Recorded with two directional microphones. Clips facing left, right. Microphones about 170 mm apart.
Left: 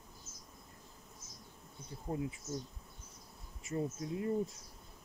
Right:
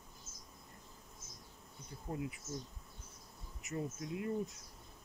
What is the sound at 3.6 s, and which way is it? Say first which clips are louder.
Speech: left 4 dB; 35° left (ahead or behind).